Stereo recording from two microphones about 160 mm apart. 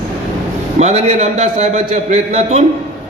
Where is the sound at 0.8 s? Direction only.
45° right (ahead or behind).